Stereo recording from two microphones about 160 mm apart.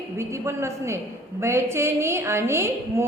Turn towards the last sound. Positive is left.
turn(degrees=-15)  # may be behind; listen again after turning